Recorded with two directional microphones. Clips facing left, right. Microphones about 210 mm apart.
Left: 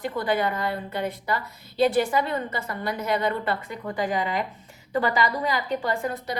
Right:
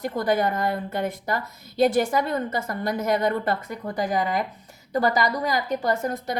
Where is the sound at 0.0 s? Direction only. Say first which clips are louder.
Right 2 dB; 45° right (ahead or behind).